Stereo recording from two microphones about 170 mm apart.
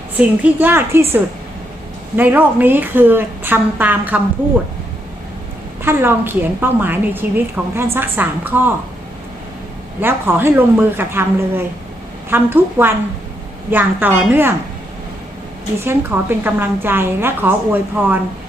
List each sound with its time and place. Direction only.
0.2 s a woman's voice: 10° right (ahead or behind)
2.1 s a woman's voice: 10° right (ahead or behind)
5.8 s a woman's voice: 15° right (ahead or behind)
10.0 s a woman's voice: 15° right (ahead or behind)
15.8 s a woman's voice: 15° right (ahead or behind)